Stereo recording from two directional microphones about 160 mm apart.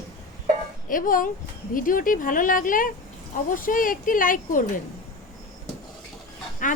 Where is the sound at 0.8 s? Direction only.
60° left (ahead or behind).